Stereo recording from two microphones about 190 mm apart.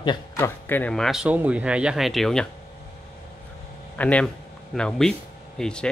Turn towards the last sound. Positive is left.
turn(degrees=5)  # may be behind; listen again after turning